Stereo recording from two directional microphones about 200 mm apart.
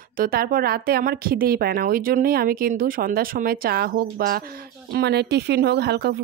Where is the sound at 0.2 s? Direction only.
45° right (ahead or behind).